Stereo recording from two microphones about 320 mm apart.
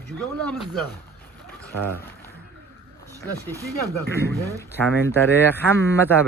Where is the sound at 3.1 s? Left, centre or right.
Centre.